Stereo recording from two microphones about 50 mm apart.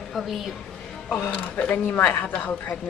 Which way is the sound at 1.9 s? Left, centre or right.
Left.